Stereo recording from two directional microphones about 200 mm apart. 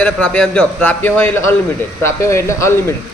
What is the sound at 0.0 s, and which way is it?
A man's voice, 5° left (ahead or behind).